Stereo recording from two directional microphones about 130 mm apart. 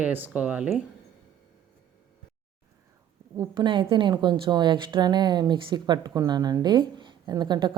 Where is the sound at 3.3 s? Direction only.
30° right (ahead or behind).